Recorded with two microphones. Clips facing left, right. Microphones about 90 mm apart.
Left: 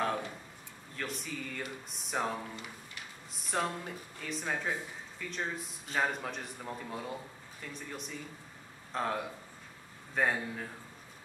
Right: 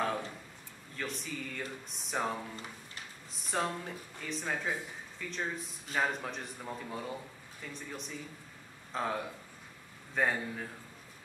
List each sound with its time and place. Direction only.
0.0 s a sound: centre (ahead or behind)
0.9 s a man's voice: centre (ahead or behind)
2.5 s speech: 35° right (ahead or behind)
3.4 s a man's voice: centre (ahead or behind)